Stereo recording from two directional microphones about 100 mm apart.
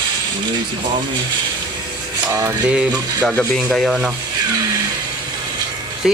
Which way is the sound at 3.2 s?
15° left (ahead or behind).